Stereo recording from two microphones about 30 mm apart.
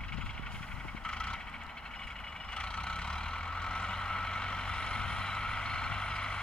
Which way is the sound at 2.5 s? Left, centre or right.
Left.